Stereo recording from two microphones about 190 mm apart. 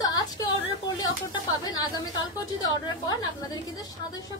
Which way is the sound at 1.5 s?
20° left (ahead or behind).